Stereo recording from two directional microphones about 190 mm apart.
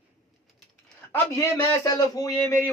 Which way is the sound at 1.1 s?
15° left (ahead or behind).